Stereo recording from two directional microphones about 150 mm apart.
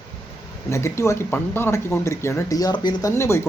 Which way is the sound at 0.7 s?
20° left (ahead or behind).